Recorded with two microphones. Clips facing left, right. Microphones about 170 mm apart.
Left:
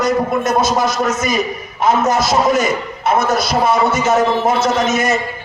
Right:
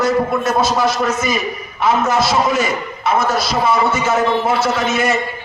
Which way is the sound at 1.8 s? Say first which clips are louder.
Left 1 dB; 45° left (ahead or behind).